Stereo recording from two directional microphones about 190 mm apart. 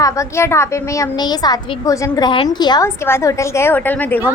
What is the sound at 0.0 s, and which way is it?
A woman's voice, 15° left (ahead or behind).